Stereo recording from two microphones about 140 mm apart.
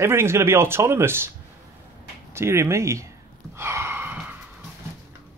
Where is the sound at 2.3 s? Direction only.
20° right (ahead or behind).